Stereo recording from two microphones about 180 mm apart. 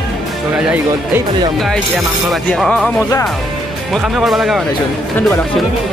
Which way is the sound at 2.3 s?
Centre (ahead or behind).